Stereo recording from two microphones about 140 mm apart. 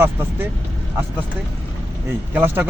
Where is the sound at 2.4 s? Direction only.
15° right (ahead or behind).